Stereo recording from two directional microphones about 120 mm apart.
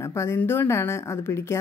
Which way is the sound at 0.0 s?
25° left (ahead or behind).